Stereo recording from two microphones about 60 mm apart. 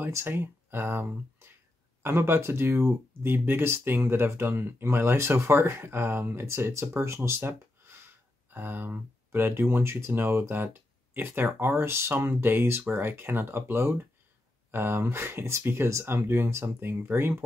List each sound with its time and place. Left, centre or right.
0.1 s speech: right
8.5 s speech: right